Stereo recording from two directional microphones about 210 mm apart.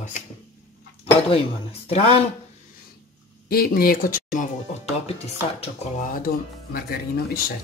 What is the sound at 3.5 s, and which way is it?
Speech, 45° left (ahead or behind).